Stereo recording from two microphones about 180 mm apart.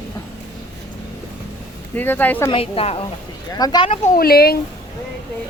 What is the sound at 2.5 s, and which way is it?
Speech, 30° left (ahead or behind).